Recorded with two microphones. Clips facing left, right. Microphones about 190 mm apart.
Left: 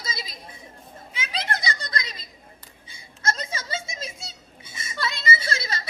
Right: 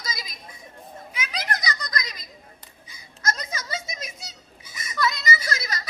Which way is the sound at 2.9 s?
30° left (ahead or behind).